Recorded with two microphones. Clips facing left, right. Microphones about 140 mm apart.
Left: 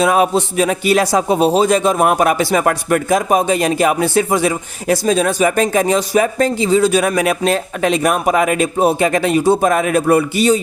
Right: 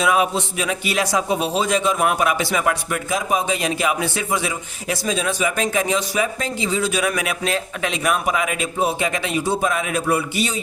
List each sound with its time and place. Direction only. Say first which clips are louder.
0.0 s a man's voice: left 5 dB; 40° left (ahead or behind)